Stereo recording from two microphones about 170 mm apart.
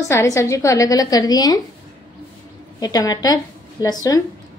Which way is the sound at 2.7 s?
20° left (ahead or behind).